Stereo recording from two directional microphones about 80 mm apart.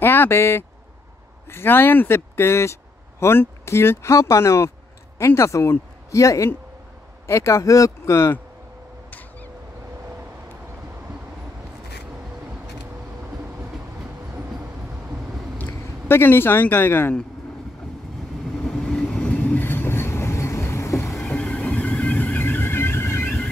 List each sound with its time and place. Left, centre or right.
0.0 s speech: left
15.5 s speech: left
18.7 s train: centre; by 21.1 s left
21.3 s vehicle: centre
23.2 s a sound: centre